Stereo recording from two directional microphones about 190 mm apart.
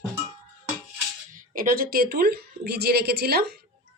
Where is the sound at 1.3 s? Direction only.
45° right (ahead or behind).